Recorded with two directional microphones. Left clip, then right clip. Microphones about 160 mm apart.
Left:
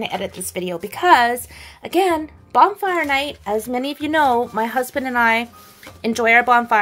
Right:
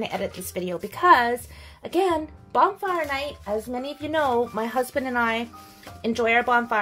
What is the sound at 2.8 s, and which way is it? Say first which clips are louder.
A woman's voice: left 7 dB; 45° left (ahead or behind).